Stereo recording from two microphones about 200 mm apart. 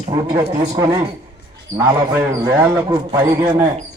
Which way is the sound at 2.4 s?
15° right (ahead or behind).